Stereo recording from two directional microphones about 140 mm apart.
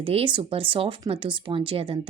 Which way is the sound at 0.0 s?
40° right (ahead or behind).